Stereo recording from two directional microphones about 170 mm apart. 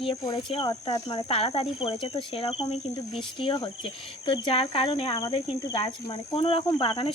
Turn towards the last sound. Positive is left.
turn(degrees=30)  # may be behind; listen again after turning